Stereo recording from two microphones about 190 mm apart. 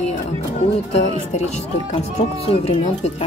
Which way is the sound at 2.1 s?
35° left (ahead or behind).